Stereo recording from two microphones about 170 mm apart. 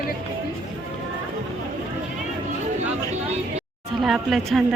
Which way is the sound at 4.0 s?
Centre (ahead or behind).